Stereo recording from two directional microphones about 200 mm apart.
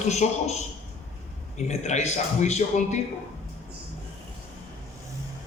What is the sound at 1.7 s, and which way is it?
A man's voice, 35° left (ahead or behind).